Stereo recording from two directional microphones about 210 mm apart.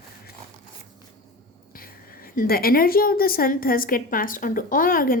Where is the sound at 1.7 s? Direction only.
45° left (ahead or behind).